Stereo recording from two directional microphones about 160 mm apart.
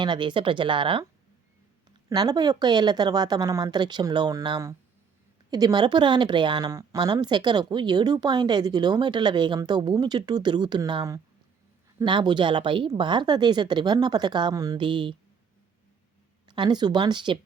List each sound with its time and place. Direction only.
0.0 s speech: 30° right (ahead or behind)
2.0 s a woman's voice: 25° right (ahead or behind)
16.5 s a woman's voice: 25° right (ahead or behind)